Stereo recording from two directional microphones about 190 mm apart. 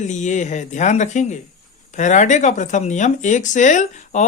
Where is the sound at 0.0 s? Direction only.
40° left (ahead or behind).